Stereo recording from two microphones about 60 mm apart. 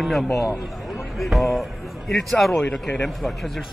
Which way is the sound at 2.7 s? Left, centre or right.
Centre.